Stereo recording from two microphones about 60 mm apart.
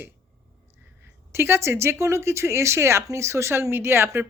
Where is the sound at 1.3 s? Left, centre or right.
Right.